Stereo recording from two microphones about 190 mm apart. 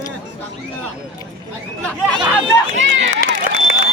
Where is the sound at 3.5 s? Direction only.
50° left (ahead or behind).